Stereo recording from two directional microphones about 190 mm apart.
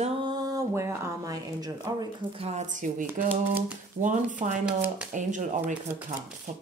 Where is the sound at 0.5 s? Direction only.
15° right (ahead or behind).